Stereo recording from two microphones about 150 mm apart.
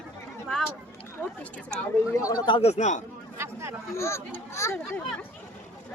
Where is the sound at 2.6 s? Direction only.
45° left (ahead or behind).